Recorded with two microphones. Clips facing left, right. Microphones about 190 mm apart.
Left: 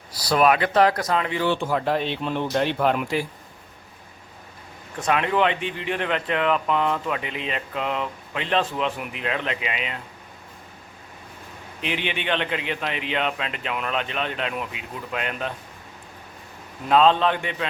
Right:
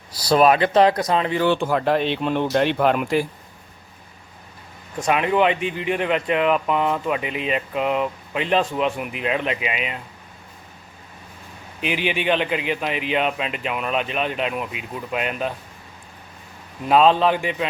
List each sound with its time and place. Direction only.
0.3 s speech: 30° right (ahead or behind)
1.5 s speech: 65° right (ahead or behind)
5.0 s speech: 10° right (ahead or behind)
5.5 s speech: 30° left (ahead or behind)
5.9 s speech: 10° right (ahead or behind)
11.8 s speech: 10° right (ahead or behind)
16.9 s speech: 10° right (ahead or behind)